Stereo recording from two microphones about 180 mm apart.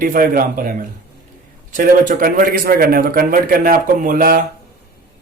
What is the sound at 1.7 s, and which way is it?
A man's voice, 45° right (ahead or behind).